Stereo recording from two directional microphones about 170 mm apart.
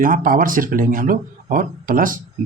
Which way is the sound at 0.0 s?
55° right (ahead or behind).